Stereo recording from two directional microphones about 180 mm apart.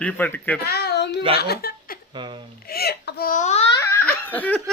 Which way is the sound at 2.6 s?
60° left (ahead or behind).